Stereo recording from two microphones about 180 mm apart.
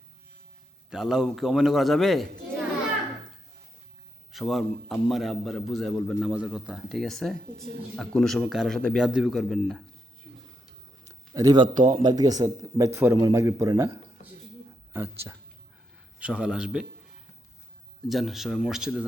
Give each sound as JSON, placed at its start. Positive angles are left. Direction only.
{"t": 0.9, "sound": "a man's voice", "side_deg": -5}
{"t": 4.3, "sound": "a man's voice", "side_deg": 0}
{"t": 11.0, "sound": "a sound", "side_deg": -20}
{"t": 12.0, "sound": "a man's voice", "side_deg": -20}
{"t": 18.1, "sound": "a man's voice", "side_deg": 0}